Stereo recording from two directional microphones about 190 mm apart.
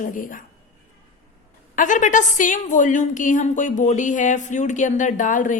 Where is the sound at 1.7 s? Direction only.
40° left (ahead or behind).